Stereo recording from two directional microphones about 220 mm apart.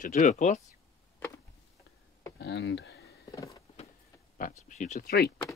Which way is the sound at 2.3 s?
50° left (ahead or behind).